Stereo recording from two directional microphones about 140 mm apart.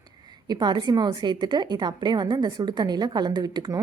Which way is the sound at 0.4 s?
30° right (ahead or behind).